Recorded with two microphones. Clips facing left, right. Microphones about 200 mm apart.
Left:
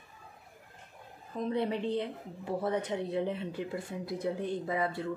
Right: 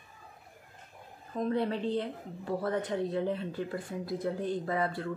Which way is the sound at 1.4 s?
20° left (ahead or behind).